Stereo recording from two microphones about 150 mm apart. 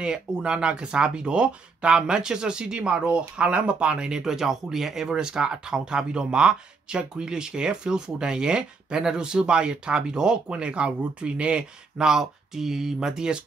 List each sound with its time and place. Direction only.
0.0 s speech: 5° right (ahead or behind)